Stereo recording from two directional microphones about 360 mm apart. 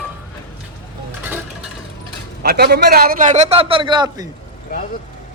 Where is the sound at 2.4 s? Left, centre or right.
Right.